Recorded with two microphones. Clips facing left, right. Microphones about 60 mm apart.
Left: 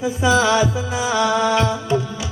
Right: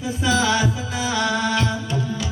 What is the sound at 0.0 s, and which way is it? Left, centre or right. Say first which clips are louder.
Music: left 4 dB; left.